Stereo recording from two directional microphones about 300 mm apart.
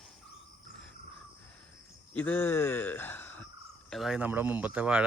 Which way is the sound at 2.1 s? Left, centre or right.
Centre.